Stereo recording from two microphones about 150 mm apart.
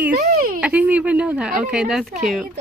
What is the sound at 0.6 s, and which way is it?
Speech, 10° right (ahead or behind).